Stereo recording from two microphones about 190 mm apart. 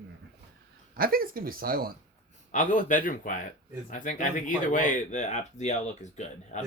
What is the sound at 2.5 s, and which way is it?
Speech, 40° left (ahead or behind).